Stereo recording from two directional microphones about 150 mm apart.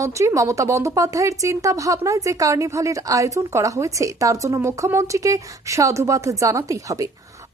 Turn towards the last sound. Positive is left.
turn(degrees=-20)  # may be behind; listen again after turning